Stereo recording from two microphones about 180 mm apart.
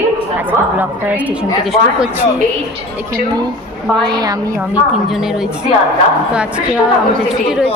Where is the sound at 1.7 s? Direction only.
5° right (ahead or behind).